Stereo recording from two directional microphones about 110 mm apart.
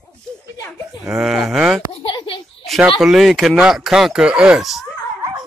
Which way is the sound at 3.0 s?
5° right (ahead or behind).